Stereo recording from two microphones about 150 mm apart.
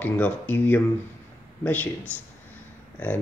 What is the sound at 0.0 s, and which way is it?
Speech, 10° left (ahead or behind).